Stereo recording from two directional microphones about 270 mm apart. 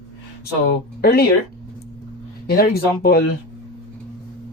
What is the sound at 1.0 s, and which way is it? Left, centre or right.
Speech, left.